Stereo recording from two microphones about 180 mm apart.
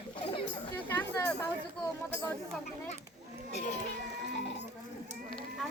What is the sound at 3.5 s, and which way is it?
Speech, 40° left (ahead or behind).